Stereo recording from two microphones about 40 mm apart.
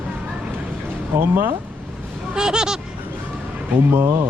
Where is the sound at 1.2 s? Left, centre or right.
Right.